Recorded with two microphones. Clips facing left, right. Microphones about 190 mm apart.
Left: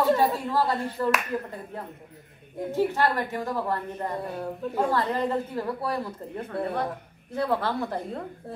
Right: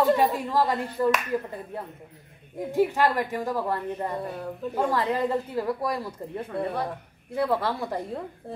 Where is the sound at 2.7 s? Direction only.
15° right (ahead or behind).